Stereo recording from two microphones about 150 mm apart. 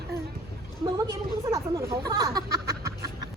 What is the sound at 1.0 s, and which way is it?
A woman's voice, 25° right (ahead or behind).